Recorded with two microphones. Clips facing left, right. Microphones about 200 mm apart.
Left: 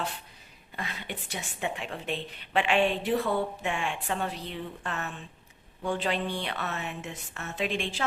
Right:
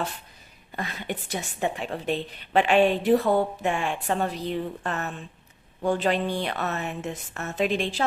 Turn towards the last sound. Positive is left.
turn(degrees=-40)  # may be behind; listen again after turning